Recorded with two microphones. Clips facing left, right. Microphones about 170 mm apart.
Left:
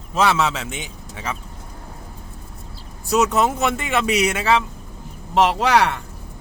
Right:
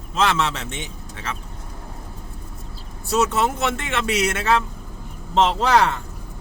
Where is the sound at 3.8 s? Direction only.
10° left (ahead or behind).